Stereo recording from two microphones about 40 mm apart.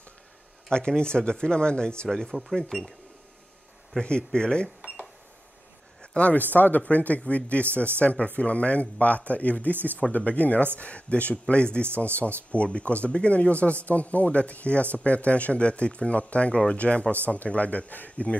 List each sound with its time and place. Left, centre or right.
0.7 s speech: left
2.0 s speech: centre
4.0 s speech: left
6.1 s speech: left